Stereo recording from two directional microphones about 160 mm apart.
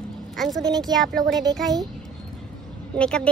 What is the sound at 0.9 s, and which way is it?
Speech, 5° left (ahead or behind).